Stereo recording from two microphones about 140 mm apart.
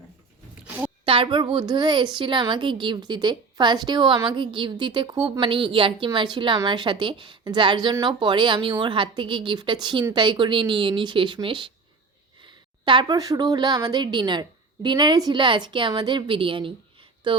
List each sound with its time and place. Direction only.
1.0 s a woman's voice: 35° right (ahead or behind)